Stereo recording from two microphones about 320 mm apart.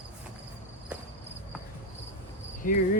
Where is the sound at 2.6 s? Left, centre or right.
Left.